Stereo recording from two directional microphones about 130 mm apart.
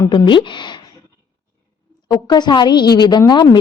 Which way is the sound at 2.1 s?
35° left (ahead or behind).